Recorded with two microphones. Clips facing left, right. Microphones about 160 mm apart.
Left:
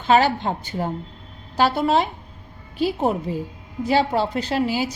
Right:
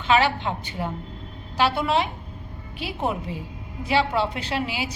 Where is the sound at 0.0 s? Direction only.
40° left (ahead or behind).